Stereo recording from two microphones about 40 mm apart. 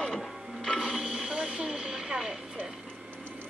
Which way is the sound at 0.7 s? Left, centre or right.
Centre.